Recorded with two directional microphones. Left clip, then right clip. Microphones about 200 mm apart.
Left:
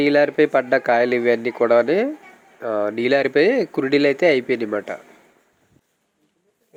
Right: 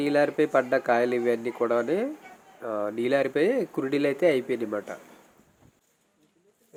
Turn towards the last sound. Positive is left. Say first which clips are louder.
# left 7 dB
turn(degrees=20)  # may be behind; listen again after turning